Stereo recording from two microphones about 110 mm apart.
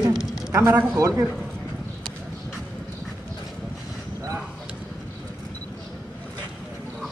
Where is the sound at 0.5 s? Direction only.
25° right (ahead or behind).